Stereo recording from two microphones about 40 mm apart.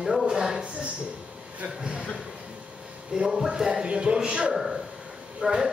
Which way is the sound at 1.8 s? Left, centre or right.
Centre.